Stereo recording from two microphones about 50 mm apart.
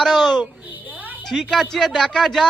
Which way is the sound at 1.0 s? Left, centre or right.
Right.